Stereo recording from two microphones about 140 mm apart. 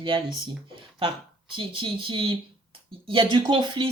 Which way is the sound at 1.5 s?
35° right (ahead or behind).